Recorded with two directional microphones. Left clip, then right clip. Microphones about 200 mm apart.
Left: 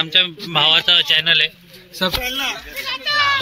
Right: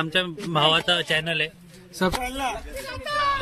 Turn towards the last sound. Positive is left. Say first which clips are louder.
# left 8 dB
turn(degrees=-55)  # may be behind; listen again after turning